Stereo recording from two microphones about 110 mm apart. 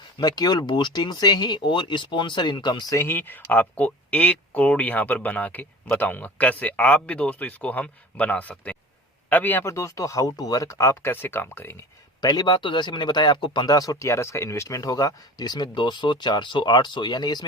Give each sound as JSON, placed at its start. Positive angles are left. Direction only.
{"t": 0.2, "sound": "speech", "side_deg": 40}
{"t": 2.9, "sound": "speech", "side_deg": 20}
{"t": 9.7, "sound": "speech", "side_deg": 30}
{"t": 12.2, "sound": "speech", "side_deg": 40}